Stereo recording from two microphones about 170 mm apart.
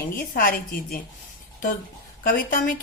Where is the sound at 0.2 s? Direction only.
60° left (ahead or behind).